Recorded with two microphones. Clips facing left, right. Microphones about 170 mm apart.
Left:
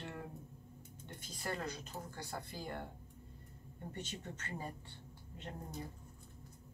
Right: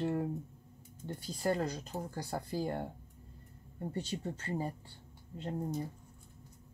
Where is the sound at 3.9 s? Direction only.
35° right (ahead or behind).